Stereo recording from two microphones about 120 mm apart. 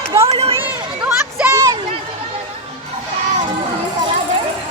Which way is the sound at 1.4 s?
10° right (ahead or behind).